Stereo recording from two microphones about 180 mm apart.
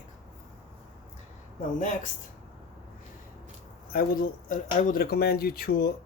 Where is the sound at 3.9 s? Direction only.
55° left (ahead or behind).